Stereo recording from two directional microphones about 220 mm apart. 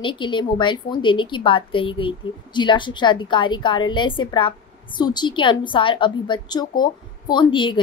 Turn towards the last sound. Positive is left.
turn(degrees=20)  # may be behind; listen again after turning